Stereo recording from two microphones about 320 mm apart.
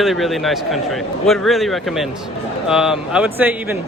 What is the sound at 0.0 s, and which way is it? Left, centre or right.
Speech, centre.